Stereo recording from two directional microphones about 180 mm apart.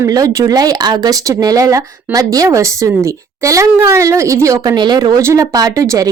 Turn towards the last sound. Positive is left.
turn(degrees=-20)  # may be behind; listen again after turning